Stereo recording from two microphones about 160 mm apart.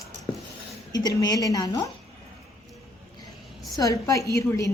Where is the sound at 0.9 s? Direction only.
25° left (ahead or behind).